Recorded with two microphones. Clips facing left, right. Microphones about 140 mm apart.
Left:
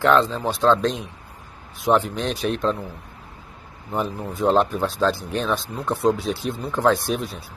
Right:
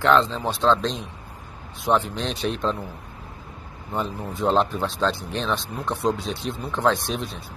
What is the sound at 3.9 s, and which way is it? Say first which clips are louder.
A man's voice: left 2 dB; 5° left (ahead or behind).